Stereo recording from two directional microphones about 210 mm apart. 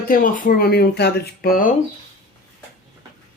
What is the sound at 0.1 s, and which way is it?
Speech, 40° left (ahead or behind).